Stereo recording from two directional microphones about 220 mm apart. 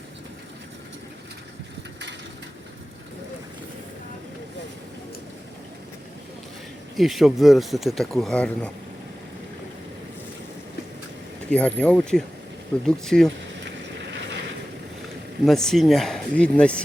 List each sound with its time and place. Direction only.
6.9 s speech: centre (ahead or behind)
11.5 s speech: 5° left (ahead or behind)
13.7 s vehicle: 55° right (ahead or behind)
15.4 s speech: centre (ahead or behind)